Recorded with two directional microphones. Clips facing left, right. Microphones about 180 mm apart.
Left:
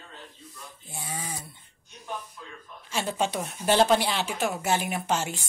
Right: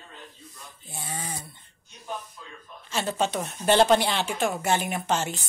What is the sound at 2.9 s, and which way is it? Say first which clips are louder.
Speech: right 1 dB; 10° left (ahead or behind).